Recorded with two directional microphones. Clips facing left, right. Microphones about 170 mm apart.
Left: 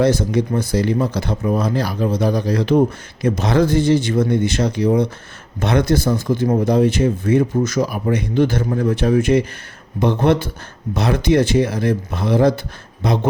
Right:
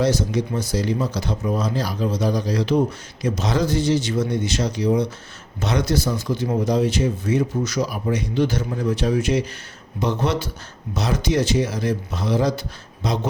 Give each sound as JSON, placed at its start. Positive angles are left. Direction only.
{"t": 0.0, "sound": "speech", "side_deg": 55}